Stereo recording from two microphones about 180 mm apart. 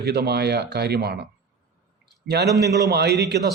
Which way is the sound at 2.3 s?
60° right (ahead or behind).